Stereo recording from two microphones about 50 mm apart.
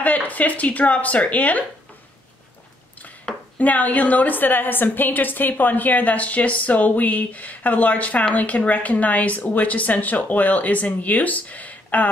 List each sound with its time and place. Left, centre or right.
0.0 s a woman's voice: left
3.5 s a woman's voice: left